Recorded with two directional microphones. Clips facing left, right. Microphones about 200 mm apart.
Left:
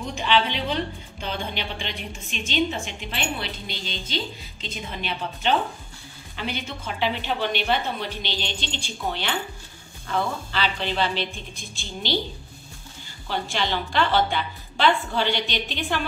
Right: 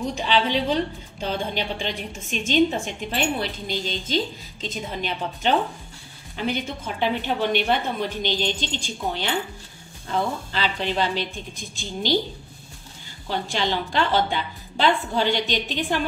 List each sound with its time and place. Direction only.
0.1 s a woman's voice: 40° right (ahead or behind)
13.3 s a woman's voice: 40° right (ahead or behind)